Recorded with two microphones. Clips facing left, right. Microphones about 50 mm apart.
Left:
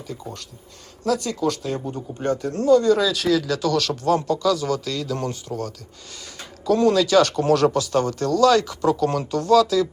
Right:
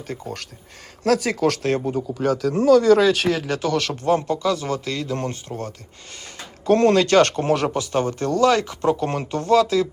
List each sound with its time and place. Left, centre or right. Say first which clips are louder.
1.0 s speech: right 3 dB; right
3.2 s speech: left 1 dB; right
6.7 s speech: right 2 dB; right
7.4 s speech: left 3 dB; right